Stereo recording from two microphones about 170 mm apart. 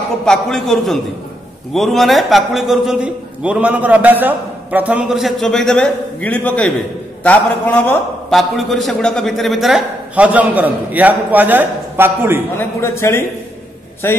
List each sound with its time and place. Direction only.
0.2 s a man's voice: 5° left (ahead or behind)
12.5 s a man's voice: 15° left (ahead or behind)